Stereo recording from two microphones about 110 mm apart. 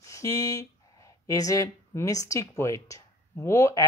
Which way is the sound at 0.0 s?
30° left (ahead or behind).